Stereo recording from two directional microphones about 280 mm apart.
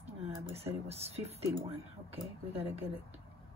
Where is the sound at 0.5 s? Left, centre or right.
Right.